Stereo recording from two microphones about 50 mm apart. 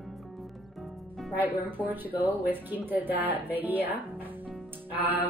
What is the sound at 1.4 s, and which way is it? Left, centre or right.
Speech, right.